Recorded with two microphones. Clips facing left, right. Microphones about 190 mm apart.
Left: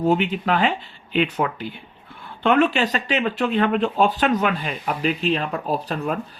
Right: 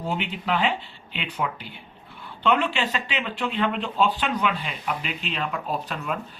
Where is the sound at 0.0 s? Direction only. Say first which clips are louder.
Left 9 dB; 45° left (ahead or behind).